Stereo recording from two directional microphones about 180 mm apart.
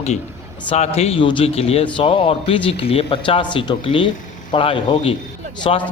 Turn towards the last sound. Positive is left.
turn(degrees=30)  # may be behind; listen again after turning